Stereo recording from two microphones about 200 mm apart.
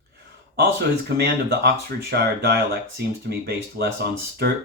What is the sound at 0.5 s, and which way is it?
Speech, 55° right (ahead or behind).